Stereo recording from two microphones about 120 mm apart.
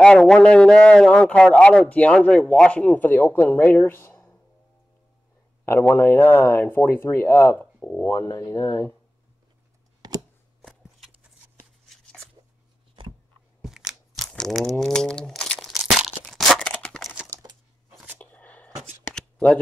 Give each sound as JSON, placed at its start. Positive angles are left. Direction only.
{"t": 0.0, "sound": "a man's voice", "side_deg": 5}
{"t": 5.7, "sound": "speech", "side_deg": 15}
{"t": 7.5, "sound": "speech", "side_deg": 10}
{"t": 8.1, "sound": "speech", "side_deg": 30}
{"t": 10.6, "sound": "a sound", "side_deg": 0}
{"t": 13.6, "sound": "crumpling", "side_deg": -5}
{"t": 18.2, "sound": "a sound", "side_deg": 10}